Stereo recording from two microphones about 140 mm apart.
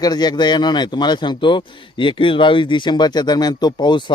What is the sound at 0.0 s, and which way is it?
A man's voice, 30° left (ahead or behind).